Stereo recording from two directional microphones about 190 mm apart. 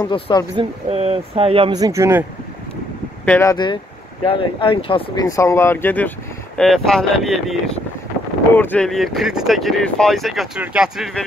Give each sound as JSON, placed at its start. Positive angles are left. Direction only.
{"t": 0.0, "sound": "speech", "side_deg": 20}
{"t": 0.6, "sound": "speech", "side_deg": -35}
{"t": 3.3, "sound": "speech", "side_deg": 10}
{"t": 3.5, "sound": "speech", "side_deg": 25}